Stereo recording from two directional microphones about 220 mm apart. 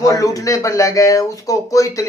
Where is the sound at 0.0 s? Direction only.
15° left (ahead or behind).